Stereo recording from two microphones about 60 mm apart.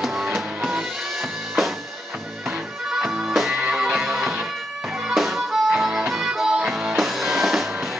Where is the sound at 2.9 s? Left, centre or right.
Centre.